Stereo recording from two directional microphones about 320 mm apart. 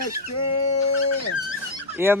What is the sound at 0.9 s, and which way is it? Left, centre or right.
Dog, left.